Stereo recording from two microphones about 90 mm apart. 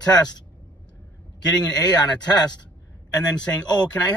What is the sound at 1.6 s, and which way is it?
Speech, 50° left (ahead or behind).